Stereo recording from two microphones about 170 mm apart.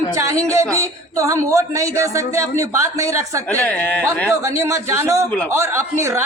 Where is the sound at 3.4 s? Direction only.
10° left (ahead or behind).